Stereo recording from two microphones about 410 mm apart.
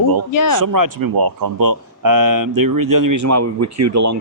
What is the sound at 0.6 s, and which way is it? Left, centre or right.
Speech, right.